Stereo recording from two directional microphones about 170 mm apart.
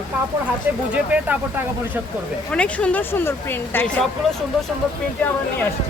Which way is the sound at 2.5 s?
5° left (ahead or behind).